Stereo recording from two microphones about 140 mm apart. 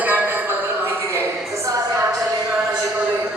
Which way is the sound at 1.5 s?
25° right (ahead or behind).